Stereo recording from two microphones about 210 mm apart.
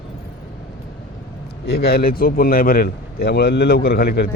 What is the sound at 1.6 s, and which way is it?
A man's voice, 50° left (ahead or behind).